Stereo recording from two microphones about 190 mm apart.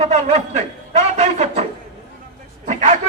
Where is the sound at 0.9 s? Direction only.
35° right (ahead or behind).